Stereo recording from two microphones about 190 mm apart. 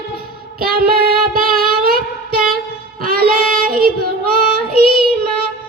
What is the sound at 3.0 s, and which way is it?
Child singing, 50° right (ahead or behind).